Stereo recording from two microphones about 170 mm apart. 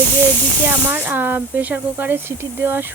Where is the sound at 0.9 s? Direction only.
10° right (ahead or behind).